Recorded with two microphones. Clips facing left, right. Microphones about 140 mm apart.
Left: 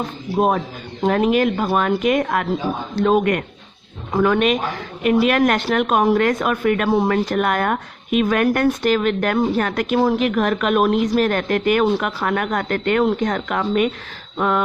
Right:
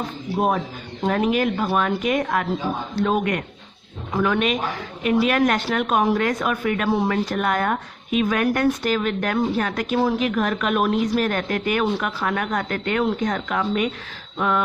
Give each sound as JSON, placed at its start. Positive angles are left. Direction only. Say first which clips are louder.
{"t": 0.3, "sound": "a man's voice", "louder": "left 4 dB", "side_deg": 40}